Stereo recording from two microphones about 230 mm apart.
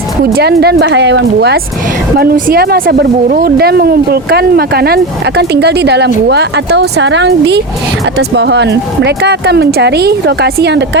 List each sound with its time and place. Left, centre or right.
0.3 s speech: right